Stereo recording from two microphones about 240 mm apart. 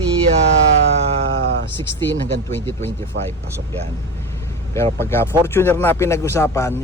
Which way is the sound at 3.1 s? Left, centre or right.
Right.